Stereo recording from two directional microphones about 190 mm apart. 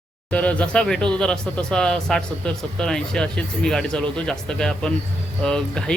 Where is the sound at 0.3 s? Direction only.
5° left (ahead or behind).